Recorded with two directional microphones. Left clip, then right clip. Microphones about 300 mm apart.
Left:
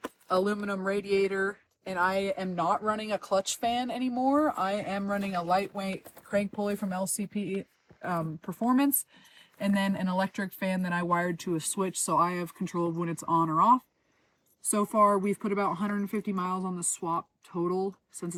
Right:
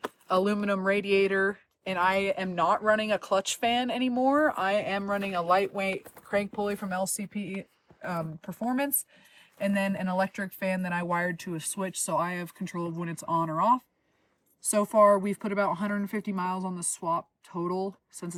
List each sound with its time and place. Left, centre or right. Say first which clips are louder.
0.3 s speech: right 2 dB; right
1.0 s speech: right 1 dB; centre
1.3 s speech: right 4 dB; right
3.8 s speech: right 3 dB; centre
4.1 s speech: right 2 dB; right
4.7 s speech: right 4 dB; centre
7.2 s speech: left 3 dB; centre